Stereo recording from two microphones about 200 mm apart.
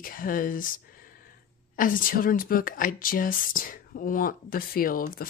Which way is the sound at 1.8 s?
45° left (ahead or behind).